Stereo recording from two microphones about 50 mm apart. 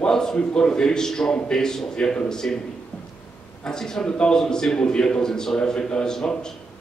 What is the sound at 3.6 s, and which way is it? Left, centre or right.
A man's voice, centre.